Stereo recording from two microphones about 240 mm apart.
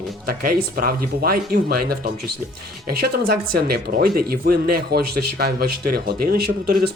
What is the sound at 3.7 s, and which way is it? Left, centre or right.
Speech, right.